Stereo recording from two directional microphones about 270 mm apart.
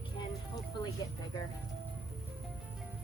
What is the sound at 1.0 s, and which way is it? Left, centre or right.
Speech, centre.